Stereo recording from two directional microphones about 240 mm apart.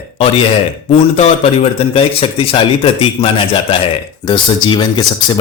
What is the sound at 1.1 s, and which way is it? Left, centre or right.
A man's voice, left.